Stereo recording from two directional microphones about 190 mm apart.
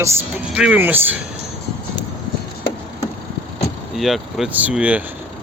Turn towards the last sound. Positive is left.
turn(degrees=-5)  # may be behind; listen again after turning